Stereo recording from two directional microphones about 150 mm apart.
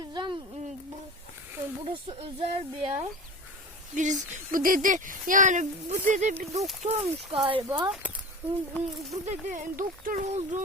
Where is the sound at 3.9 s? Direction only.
55° right (ahead or behind).